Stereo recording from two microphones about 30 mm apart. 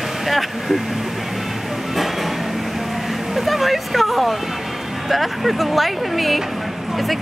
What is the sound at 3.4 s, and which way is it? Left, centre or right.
Vehicle, centre.